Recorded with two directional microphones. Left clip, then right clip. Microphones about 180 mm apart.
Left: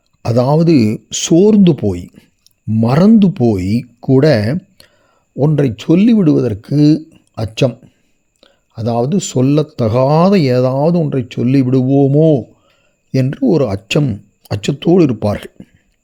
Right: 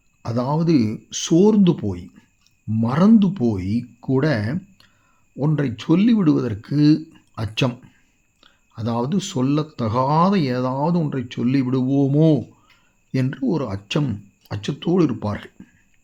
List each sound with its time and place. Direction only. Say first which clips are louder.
0.2 s speech: left 11 dB; 45° left (ahead or behind)